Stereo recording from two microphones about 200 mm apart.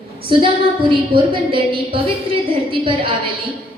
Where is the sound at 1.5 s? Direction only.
25° right (ahead or behind).